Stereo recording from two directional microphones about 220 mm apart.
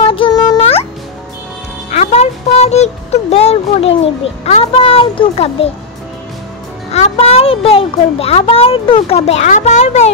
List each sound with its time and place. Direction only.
0.0 s music: 25° left (ahead or behind)
1.9 s speech: 30° left (ahead or behind)
6.9 s a child's voice: 30° left (ahead or behind)